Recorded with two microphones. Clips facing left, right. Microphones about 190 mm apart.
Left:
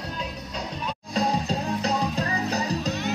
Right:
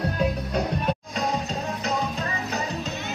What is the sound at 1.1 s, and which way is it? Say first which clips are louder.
Music: left 2 dB; 35° left (ahead or behind).